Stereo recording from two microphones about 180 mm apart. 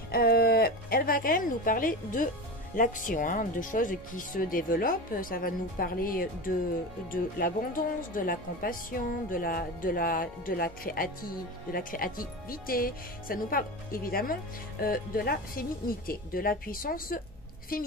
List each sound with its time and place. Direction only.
0.1 s speech: 60° left (ahead or behind)